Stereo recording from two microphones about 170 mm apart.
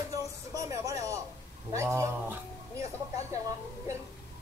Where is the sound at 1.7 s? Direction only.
15° right (ahead or behind).